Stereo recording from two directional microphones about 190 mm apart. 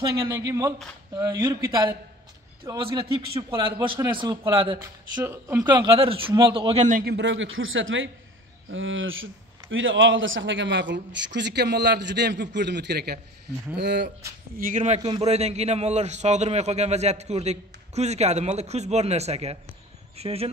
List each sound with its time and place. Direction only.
0.2 s speech: 20° right (ahead or behind)
4.8 s speech: 15° right (ahead or behind)
5.7 s speech: 25° right (ahead or behind)
7.1 s a man's voice: 70° right (ahead or behind)
7.5 s a man's voice: 90° right; by 14.1 s 60° right (ahead or behind)
14.6 s a man's voice: 40° right (ahead or behind)